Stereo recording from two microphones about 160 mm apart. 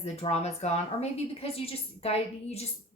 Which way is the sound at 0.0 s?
40° left (ahead or behind).